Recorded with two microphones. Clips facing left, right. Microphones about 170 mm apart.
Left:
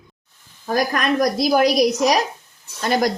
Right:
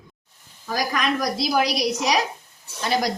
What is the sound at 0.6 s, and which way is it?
A woman's voice, 55° left (ahead or behind).